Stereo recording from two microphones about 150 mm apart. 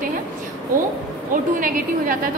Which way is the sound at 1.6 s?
70° right (ahead or behind).